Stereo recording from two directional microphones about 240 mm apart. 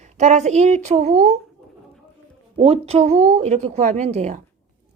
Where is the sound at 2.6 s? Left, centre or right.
Right.